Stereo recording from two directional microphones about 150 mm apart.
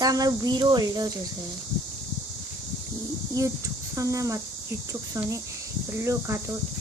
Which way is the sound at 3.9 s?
20° right (ahead or behind).